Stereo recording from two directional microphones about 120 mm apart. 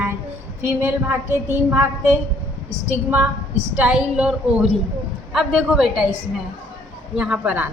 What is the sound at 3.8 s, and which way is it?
A woman's voice, 10° right (ahead or behind).